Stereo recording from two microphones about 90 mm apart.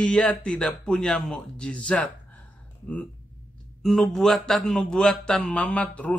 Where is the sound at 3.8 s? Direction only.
Centre (ahead or behind).